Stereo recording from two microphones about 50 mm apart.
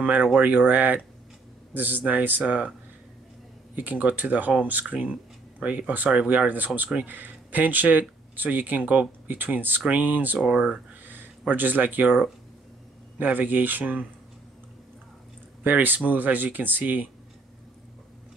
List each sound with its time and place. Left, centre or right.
0.0 s speech: right
3.7 s speech: right
13.2 s speech: right
15.6 s speech: right